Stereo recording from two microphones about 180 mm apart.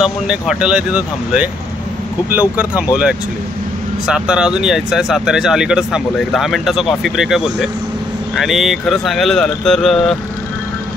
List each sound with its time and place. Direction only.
0.0 s speech: 5° right (ahead or behind)